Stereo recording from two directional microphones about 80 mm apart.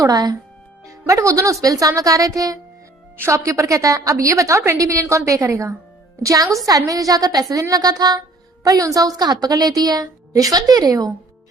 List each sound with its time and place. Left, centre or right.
0.0 s a woman's voice: right
3.2 s a woman's voice: right